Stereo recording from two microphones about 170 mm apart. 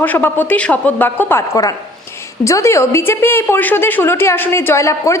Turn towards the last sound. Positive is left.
turn(degrees=20)  # may be behind; listen again after turning